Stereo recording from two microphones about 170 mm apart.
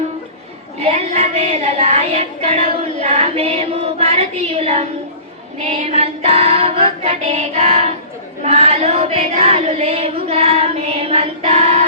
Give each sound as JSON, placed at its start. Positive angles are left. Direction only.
{"t": 0.8, "sound": "female singing", "side_deg": -35}